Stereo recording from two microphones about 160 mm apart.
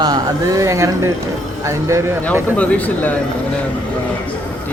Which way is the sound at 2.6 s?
10° left (ahead or behind).